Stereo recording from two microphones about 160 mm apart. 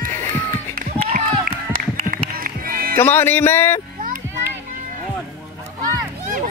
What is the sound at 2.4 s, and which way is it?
Music, 60° right (ahead or behind).